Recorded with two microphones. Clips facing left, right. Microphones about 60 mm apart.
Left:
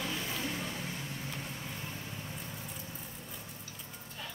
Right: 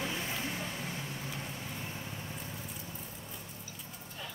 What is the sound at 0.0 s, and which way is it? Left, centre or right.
Vehicle, right.